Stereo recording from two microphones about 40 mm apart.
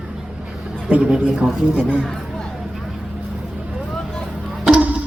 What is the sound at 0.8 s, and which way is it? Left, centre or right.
A man's voice, right.